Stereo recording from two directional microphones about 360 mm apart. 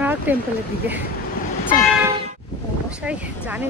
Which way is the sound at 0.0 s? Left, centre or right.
Centre.